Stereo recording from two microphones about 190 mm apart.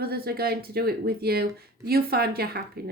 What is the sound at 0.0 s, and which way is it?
A woman's voice, 55° right (ahead or behind).